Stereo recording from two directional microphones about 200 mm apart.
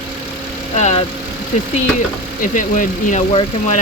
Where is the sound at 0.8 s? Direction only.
35° left (ahead or behind).